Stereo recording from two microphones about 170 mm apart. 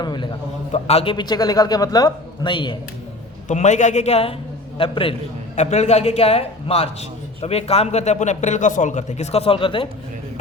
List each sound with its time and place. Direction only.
0.0 s a man's voice: 25° left (ahead or behind)
0.7 s a man's voice: 35° left (ahead or behind)
3.5 s a man's voice: 45° left (ahead or behind)